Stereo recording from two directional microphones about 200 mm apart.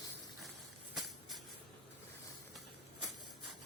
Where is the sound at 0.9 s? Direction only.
Centre (ahead or behind).